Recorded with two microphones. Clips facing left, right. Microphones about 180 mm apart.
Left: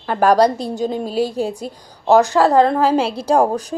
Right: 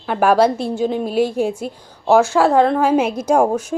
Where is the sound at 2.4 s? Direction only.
Centre (ahead or behind).